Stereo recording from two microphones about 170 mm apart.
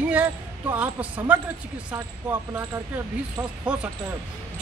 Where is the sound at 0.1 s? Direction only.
10° right (ahead or behind).